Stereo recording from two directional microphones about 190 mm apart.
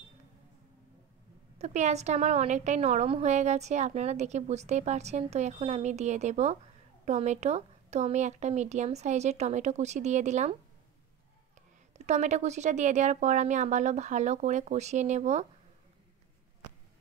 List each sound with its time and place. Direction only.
1.6 s a woman's voice: 35° right (ahead or behind)
11.9 s a woman's voice: 35° right (ahead or behind)